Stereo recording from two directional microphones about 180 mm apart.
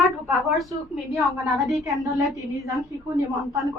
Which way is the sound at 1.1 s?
Centre (ahead or behind).